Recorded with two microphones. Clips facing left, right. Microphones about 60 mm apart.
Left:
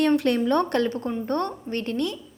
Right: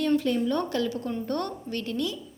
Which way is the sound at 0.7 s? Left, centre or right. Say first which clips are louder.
Left 4 dB; left.